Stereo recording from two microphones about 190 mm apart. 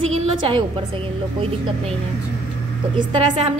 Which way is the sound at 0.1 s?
35° right (ahead or behind).